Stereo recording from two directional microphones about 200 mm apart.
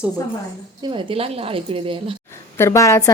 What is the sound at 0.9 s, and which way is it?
A woman's voice, 30° right (ahead or behind).